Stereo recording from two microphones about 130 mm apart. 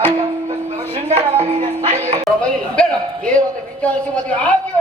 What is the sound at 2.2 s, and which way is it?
Music, 5° left (ahead or behind).